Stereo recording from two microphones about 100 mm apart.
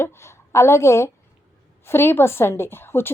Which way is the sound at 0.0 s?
25° left (ahead or behind).